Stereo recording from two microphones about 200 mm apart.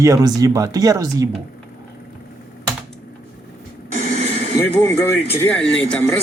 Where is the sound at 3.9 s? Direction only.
35° right (ahead or behind).